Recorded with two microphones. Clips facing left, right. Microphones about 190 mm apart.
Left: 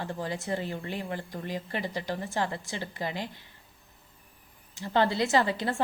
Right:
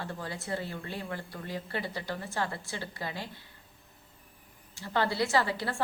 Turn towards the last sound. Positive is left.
turn(degrees=20)  # may be behind; listen again after turning